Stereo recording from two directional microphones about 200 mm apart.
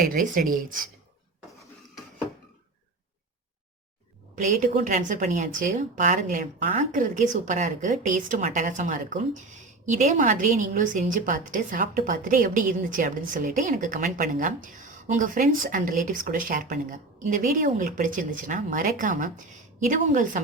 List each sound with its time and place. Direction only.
0.1 s speech: 45° right (ahead or behind)
4.4 s speech: 40° right (ahead or behind)